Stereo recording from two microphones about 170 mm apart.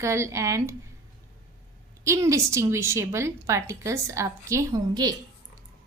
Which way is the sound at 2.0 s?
15° right (ahead or behind).